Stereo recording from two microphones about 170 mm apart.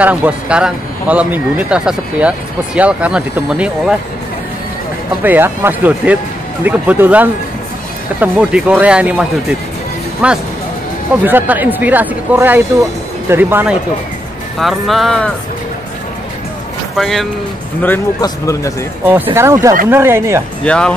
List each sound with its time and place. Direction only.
0.0 s speech: 10° right (ahead or behind)
5.2 s speech: 10° right (ahead or behind)
14.6 s speech: centre (ahead or behind)
16.9 s speech: centre (ahead or behind)
18.2 s speech: 20° left (ahead or behind)
19.3 s speech: 15° right (ahead or behind)
20.6 s speech: 5° left (ahead or behind)